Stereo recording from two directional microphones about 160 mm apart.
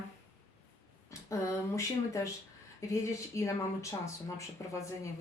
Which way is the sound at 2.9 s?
20° left (ahead or behind).